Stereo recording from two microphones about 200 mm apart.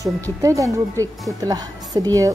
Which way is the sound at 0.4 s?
15° right (ahead or behind).